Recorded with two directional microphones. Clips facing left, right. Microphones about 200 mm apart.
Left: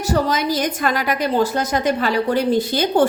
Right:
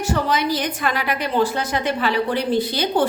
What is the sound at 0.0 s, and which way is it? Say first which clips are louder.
A woman's voice: left 2 dB; 40° left (ahead or behind).